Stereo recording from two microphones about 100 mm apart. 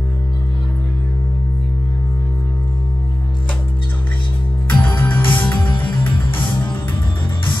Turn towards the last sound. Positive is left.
turn(degrees=20)  # may be behind; listen again after turning